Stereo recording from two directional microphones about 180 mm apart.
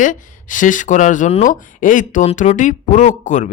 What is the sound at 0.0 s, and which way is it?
Speech, 45° left (ahead or behind).